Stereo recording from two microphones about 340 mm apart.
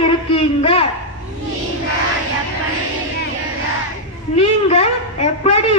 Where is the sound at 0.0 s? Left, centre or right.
Centre.